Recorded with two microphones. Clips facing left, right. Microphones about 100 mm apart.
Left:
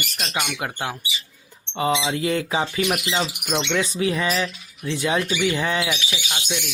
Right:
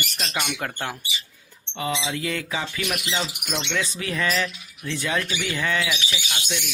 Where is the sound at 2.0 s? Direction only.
30° left (ahead or behind).